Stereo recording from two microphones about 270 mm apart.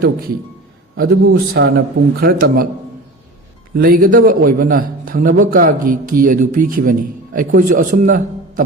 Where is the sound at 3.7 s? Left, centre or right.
Right.